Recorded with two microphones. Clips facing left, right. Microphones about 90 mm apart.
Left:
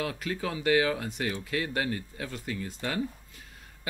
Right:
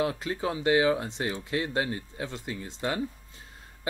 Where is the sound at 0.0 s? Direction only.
25° right (ahead or behind).